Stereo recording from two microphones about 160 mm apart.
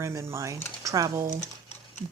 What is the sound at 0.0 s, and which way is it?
Speech, 20° right (ahead or behind).